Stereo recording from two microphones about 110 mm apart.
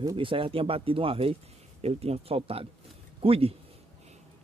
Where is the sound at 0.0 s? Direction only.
45° right (ahead or behind).